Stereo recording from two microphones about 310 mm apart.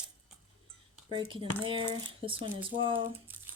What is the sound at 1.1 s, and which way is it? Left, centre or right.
Speech, centre.